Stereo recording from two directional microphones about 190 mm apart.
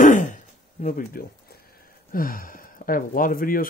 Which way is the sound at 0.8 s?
45° left (ahead or behind).